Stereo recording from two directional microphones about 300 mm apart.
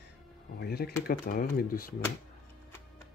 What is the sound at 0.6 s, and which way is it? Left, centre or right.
Speech, left.